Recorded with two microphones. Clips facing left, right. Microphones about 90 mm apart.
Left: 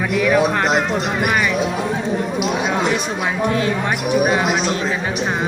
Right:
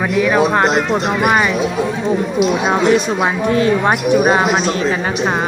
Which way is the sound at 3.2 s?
40° right (ahead or behind).